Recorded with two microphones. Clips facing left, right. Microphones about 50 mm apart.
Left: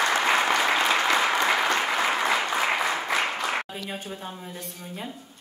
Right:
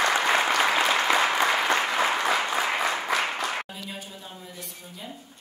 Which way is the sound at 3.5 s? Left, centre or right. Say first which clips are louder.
Left 3 dB; left.